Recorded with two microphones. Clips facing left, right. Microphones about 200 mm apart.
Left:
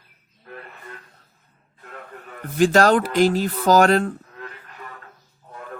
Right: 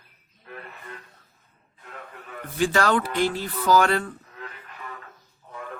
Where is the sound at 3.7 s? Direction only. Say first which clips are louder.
Left 5 dB; 40° left (ahead or behind).